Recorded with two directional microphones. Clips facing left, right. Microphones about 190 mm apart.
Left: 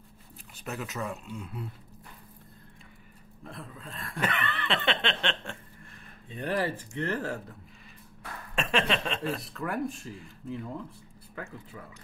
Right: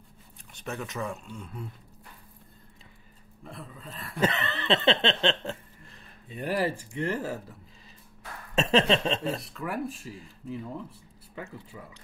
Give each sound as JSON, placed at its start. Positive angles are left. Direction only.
{"t": 0.6, "sound": "speech", "side_deg": 0}
{"t": 3.4, "sound": "speech", "side_deg": 0}
{"t": 4.2, "sound": "chuckle", "side_deg": -25}
{"t": 6.4, "sound": "speech", "side_deg": -10}
{"t": 8.5, "sound": "chuckle", "side_deg": -25}
{"t": 9.4, "sound": "speech", "side_deg": 0}